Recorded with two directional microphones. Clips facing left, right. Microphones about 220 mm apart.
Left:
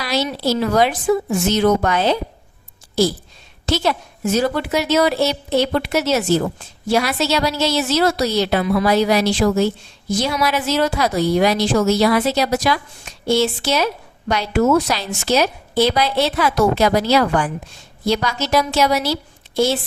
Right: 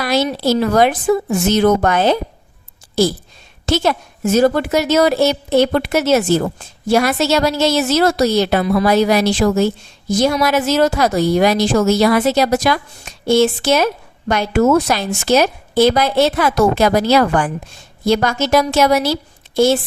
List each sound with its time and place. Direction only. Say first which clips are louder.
0.0 s a woman's voice: right 4 dB; 50° right (ahead or behind)
3.7 s a woman's voice: right 3 dB; 45° right (ahead or behind)